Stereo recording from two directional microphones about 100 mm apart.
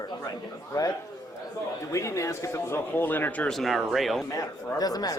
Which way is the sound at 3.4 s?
Centre (ahead or behind).